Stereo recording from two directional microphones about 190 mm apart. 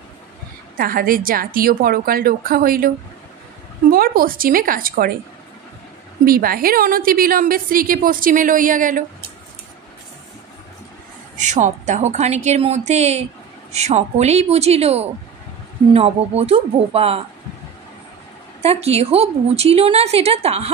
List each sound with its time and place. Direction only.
0.7 s a woman's voice: 50° right (ahead or behind)
3.9 s a woman's voice: 50° right (ahead or behind)
6.2 s a woman's voice: 50° right (ahead or behind)
11.3 s a woman's voice: 40° right (ahead or behind)
18.6 s a woman's voice: 35° right (ahead or behind)